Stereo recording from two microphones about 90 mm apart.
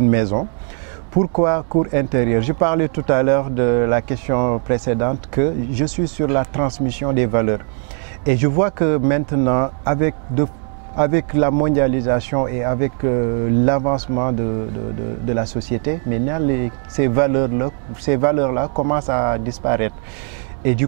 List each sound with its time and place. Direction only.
0.1 s speech: 15° right (ahead or behind)